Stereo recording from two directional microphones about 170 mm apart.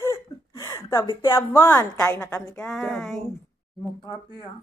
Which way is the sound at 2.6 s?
5° left (ahead or behind).